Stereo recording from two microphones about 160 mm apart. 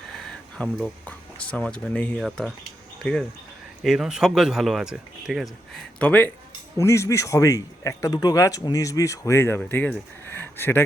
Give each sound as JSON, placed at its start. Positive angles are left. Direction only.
{"t": 0.2, "sound": "a man's voice", "side_deg": 5}